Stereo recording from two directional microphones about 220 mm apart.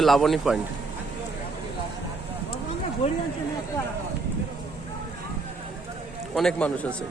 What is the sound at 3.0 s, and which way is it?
Speech, 25° left (ahead or behind).